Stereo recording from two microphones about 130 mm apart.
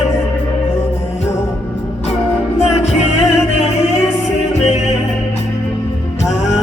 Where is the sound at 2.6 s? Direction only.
55° left (ahead or behind).